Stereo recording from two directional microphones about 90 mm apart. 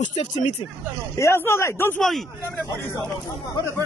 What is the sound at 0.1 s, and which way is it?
Speech, 70° left (ahead or behind).